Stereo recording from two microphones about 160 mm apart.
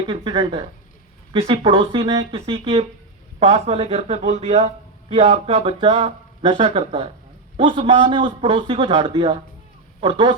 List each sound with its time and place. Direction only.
0.0 s a man's voice: 35° right (ahead or behind)